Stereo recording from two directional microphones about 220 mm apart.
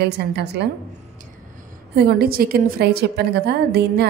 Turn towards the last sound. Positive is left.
turn(degrees=-50)  # may be behind; listen again after turning